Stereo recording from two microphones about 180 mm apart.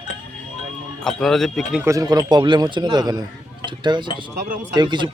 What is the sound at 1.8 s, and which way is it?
Speech, 20° right (ahead or behind).